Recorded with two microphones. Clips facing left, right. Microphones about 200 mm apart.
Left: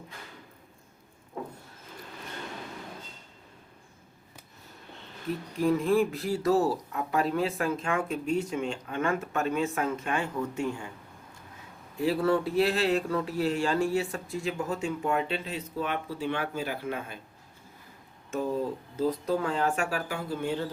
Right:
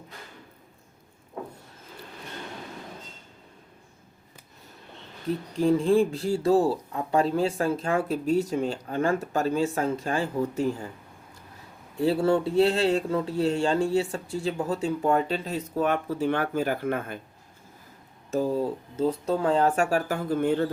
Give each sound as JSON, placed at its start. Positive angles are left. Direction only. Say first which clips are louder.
{"t": 5.5, "sound": "speech", "louder": "right 3 dB", "side_deg": -30}
{"t": 11.9, "sound": "speech", "louder": "right 3 dB", "side_deg": -30}
{"t": 18.9, "sound": "speech", "louder": "right 2 dB", "side_deg": -30}